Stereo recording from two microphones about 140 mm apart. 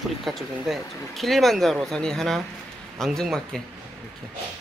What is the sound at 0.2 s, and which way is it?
Speech, centre (ahead or behind).